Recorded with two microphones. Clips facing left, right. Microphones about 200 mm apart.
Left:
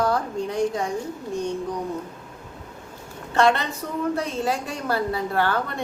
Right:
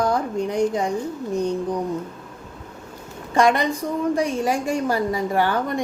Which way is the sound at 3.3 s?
15° right (ahead or behind).